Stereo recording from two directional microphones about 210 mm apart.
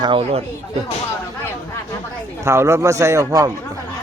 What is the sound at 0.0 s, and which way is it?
Speech, 25° right (ahead or behind).